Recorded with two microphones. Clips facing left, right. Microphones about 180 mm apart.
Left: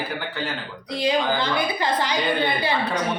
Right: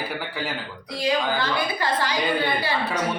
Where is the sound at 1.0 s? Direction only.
20° left (ahead or behind).